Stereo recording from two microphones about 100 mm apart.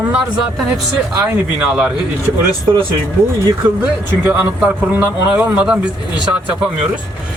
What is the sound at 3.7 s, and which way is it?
Speech, 15° right (ahead or behind).